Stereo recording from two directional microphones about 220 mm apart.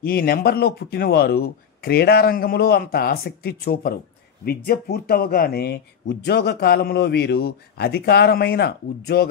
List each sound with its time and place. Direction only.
0.0 s speech: 40° left (ahead or behind)